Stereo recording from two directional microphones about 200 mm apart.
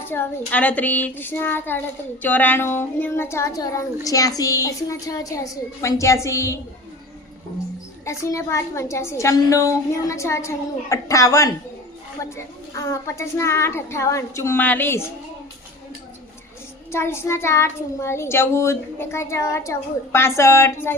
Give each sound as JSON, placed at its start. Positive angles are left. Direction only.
{"t": 0.1, "sound": "a woman's voice", "side_deg": 10}
{"t": 8.0, "sound": "a woman's voice", "side_deg": 15}
{"t": 12.7, "sound": "a woman's voice", "side_deg": 15}
{"t": 16.9, "sound": "a woman's voice", "side_deg": 10}